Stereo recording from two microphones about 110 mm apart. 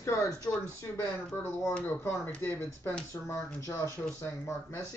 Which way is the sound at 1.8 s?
20° left (ahead or behind).